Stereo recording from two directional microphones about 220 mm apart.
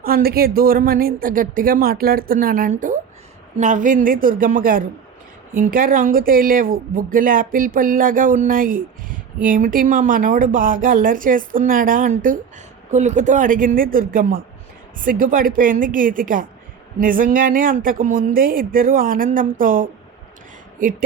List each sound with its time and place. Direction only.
0.0 s speech: 45° right (ahead or behind)